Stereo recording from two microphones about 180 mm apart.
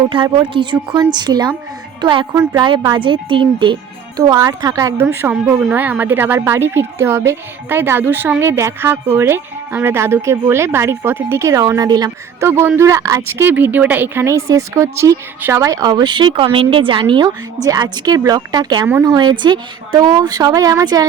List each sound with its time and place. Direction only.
0.1 s a woman's voice: 25° right (ahead or behind)
2.3 s speech: 15° right (ahead or behind)
2.6 s speech: 25° right (ahead or behind)
18.9 s speech: 10° right (ahead or behind)
19.1 s speech: 25° right (ahead or behind)